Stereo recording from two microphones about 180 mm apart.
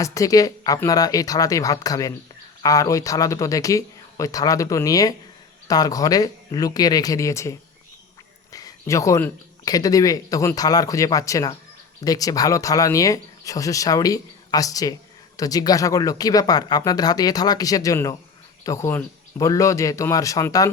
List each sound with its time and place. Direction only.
0.0 s speech: 20° left (ahead or behind)
8.5 s speech: 20° left (ahead or behind)